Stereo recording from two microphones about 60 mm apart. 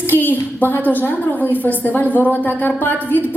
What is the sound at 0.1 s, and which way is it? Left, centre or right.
A woman's voice, left.